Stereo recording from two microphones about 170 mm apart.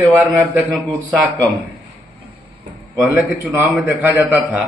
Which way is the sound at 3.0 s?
10° right (ahead or behind).